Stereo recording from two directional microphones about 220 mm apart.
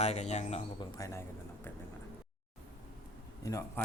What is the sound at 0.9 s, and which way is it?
Speech, 15° left (ahead or behind).